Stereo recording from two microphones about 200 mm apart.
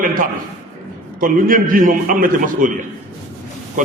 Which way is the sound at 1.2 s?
45° right (ahead or behind).